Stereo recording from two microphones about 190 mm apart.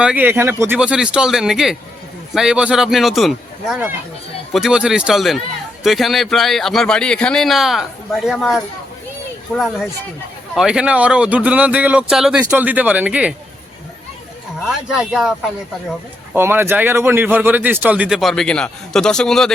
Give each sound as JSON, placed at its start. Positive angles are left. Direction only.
{"t": 0.0, "sound": "a man's voice", "side_deg": -5}
{"t": 14.6, "sound": "a man's voice", "side_deg": -5}